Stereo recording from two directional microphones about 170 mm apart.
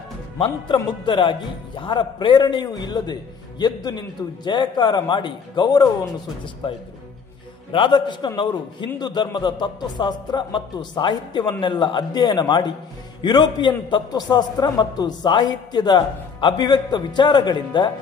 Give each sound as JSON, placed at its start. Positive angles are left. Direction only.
{"t": 0.7, "sound": "a man's voice", "side_deg": 30}
{"t": 7.7, "sound": "a man's voice", "side_deg": 30}